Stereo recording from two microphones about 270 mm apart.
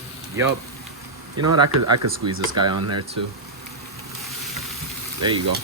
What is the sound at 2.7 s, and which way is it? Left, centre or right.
Speech, right.